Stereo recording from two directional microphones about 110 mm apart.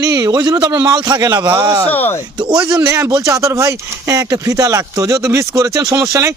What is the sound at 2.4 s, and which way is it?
Speech, 35° right (ahead or behind).